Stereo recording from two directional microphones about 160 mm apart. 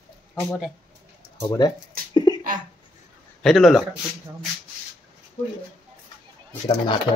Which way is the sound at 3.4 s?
Centre (ahead or behind).